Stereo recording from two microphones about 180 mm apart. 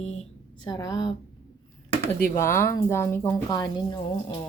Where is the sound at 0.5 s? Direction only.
25° left (ahead or behind).